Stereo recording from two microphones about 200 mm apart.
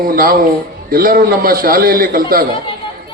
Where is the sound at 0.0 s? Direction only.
45° right (ahead or behind).